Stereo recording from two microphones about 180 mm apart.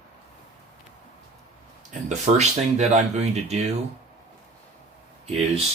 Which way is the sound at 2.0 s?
40° right (ahead or behind).